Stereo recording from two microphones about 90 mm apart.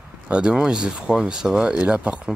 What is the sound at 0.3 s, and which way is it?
Speech, 10° right (ahead or behind).